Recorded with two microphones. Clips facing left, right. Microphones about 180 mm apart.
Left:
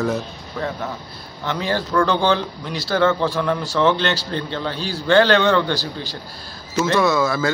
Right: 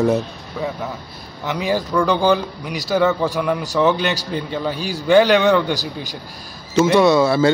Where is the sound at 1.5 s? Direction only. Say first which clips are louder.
Right 2 dB; 10° right (ahead or behind).